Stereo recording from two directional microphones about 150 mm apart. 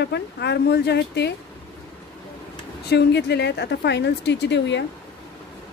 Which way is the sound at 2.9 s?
90° left.